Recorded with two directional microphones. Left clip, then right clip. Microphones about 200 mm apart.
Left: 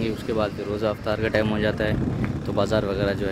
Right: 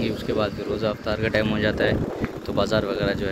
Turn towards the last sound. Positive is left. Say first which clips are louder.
# even
turn(degrees=10)  # may be behind; listen again after turning